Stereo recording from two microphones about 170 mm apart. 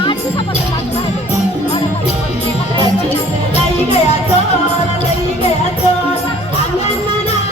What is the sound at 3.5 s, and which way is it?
Music, 40° left (ahead or behind).